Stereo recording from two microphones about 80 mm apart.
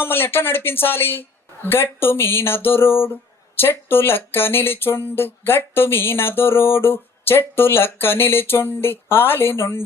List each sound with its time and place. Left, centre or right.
0.0 s speech: left